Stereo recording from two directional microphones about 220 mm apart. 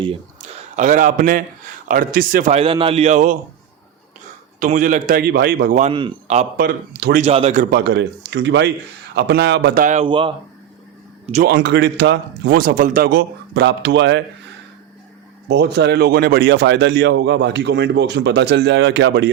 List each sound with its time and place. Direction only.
0.8 s a man's voice: 35° right (ahead or behind)
4.6 s a man's voice: 35° right (ahead or behind)
5.9 s a man's voice: 20° right (ahead or behind)
6.7 s speech: 45° right (ahead or behind)
7.2 s speech: 30° right (ahead or behind); by 9.8 s 50° right (ahead or behind)
9.8 s a man's voice: 30° right (ahead or behind)
11.4 s speech: 50° right (ahead or behind)
15.4 s speech: 50° right (ahead or behind)